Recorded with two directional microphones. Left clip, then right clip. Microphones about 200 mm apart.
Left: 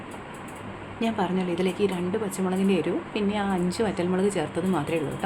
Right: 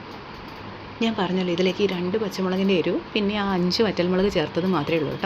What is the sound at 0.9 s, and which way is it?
Speech, 5° right (ahead or behind).